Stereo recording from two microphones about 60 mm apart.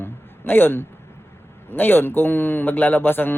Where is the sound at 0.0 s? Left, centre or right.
Left.